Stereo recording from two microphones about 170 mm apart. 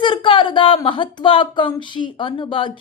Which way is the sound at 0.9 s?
30° left (ahead or behind).